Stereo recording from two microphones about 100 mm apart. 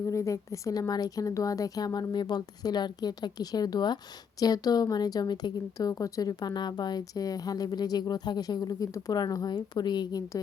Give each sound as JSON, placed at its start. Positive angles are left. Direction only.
{"t": 0.0, "sound": "a woman's voice", "side_deg": 30}